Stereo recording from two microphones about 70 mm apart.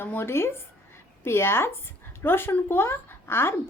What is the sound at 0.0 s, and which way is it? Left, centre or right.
A woman's voice, left.